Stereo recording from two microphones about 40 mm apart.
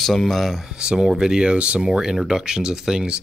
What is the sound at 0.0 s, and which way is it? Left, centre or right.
Speech, centre.